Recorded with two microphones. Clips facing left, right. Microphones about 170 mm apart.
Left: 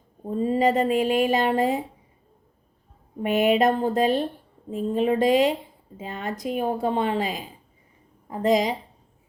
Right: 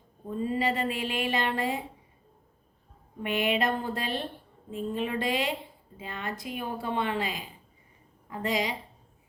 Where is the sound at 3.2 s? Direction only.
40° left (ahead or behind).